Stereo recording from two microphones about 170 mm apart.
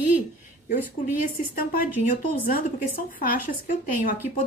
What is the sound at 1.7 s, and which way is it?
A woman's voice, 55° left (ahead or behind).